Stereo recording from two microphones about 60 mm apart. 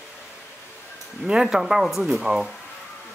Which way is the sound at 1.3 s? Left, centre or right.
Centre.